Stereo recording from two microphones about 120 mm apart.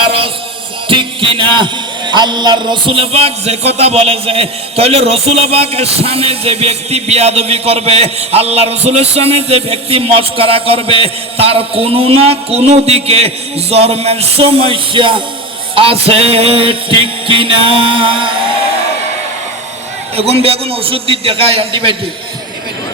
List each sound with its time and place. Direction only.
0.0 s music: 50° right (ahead or behind)
0.9 s a man's voice: 45° right (ahead or behind)
15.7 s music: 50° right (ahead or behind)
20.1 s music: 55° right (ahead or behind)